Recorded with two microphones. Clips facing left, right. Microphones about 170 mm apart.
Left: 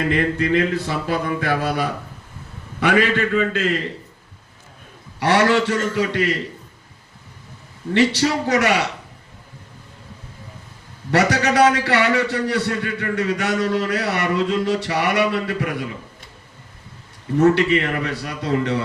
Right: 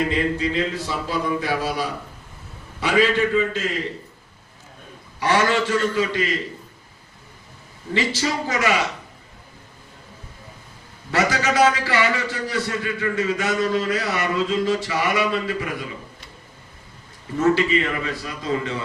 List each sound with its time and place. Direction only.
0.1 s a man's voice: 60° left (ahead or behind)
5.2 s a man's voice: 65° left (ahead or behind)
7.9 s a man's voice: 65° left (ahead or behind)
11.1 s a man's voice: 65° left (ahead or behind)
17.4 s a man's voice: 65° left (ahead or behind)